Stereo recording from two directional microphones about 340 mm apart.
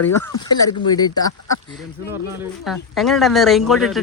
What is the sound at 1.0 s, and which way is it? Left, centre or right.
Speech, centre.